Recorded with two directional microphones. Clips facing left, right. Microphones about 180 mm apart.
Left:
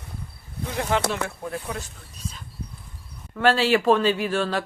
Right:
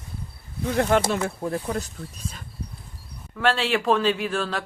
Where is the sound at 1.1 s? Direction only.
35° right (ahead or behind).